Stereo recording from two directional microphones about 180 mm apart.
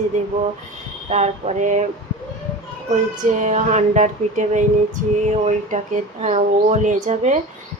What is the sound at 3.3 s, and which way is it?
Music, 40° right (ahead or behind).